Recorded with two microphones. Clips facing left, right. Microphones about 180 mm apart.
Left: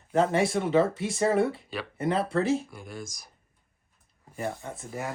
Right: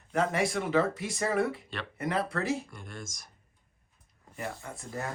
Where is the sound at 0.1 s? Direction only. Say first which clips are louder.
Left 5 dB; 30° left (ahead or behind).